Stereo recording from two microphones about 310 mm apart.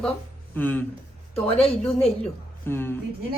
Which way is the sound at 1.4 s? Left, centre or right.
Centre.